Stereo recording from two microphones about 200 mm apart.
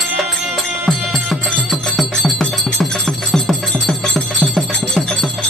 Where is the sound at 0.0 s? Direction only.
Centre (ahead or behind).